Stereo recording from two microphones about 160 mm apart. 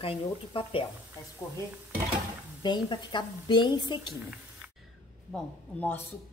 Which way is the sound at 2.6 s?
30° left (ahead or behind).